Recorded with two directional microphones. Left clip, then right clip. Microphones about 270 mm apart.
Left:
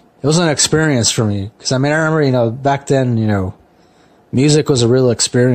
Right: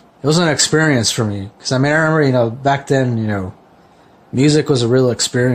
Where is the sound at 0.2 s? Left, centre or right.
Centre.